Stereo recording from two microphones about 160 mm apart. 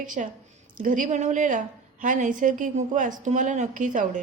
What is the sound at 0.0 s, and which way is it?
A woman's voice, 55° right (ahead or behind).